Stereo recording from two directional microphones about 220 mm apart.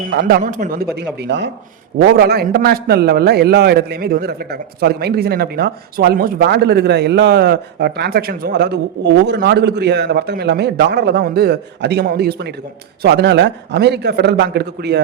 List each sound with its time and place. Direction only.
0.0 s speech: 40° right (ahead or behind)
0.9 s a man's voice: 50° right (ahead or behind)